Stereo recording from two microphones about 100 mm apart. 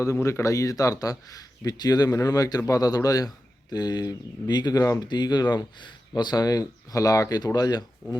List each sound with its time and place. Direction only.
0.0 s speech: 30° left (ahead or behind)